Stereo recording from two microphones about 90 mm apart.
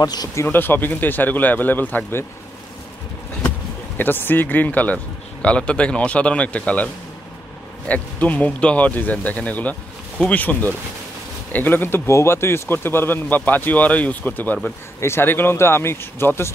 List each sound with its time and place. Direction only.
0.0 s speech: 45° left (ahead or behind)
0.4 s speech: 25° left (ahead or behind)
4.0 s speech: 20° left (ahead or behind)
7.9 s speech: 15° left (ahead or behind)